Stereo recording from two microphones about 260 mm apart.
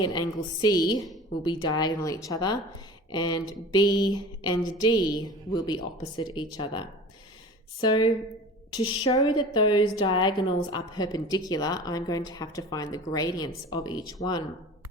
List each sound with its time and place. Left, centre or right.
0.0 s a woman's voice: centre